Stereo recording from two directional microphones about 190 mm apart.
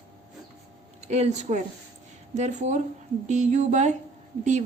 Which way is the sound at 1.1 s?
35° right (ahead or behind).